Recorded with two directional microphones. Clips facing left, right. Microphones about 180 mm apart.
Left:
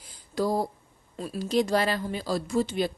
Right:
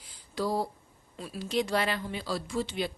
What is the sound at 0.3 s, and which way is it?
A woman's voice, 45° left (ahead or behind).